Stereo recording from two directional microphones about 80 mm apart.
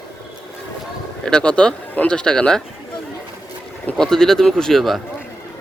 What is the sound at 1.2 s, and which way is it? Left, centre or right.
Speech, centre.